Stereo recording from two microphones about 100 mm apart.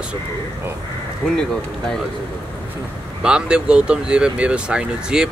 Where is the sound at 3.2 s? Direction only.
10° right (ahead or behind).